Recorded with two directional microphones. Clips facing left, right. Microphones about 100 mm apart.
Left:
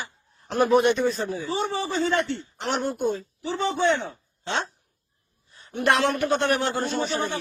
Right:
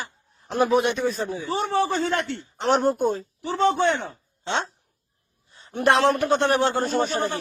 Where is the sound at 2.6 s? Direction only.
40° right (ahead or behind).